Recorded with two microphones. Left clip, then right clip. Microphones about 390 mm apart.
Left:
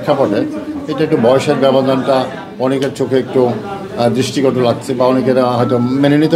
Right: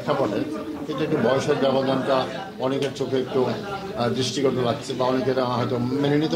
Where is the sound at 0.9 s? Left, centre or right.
Left.